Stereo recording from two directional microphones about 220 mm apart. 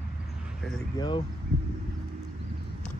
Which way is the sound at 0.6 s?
Centre (ahead or behind).